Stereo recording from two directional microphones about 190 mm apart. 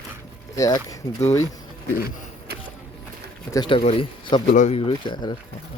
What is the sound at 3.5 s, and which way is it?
Speech, 25° left (ahead or behind).